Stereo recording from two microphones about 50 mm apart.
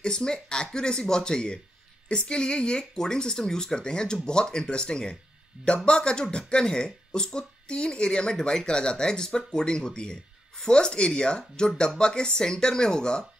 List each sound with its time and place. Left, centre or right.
0.0 s speech: centre